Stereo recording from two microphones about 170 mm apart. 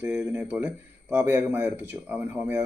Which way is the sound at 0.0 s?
5° right (ahead or behind).